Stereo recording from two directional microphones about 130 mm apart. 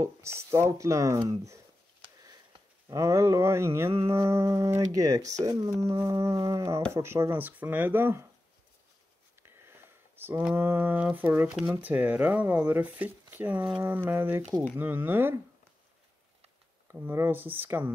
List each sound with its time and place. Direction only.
0.0 s speech: 20° right (ahead or behind)
2.9 s speech: 25° right (ahead or behind)
9.6 s a sound: 20° right (ahead or behind)
10.5 s speech: 15° right (ahead or behind)
16.8 s speech: 15° right (ahead or behind)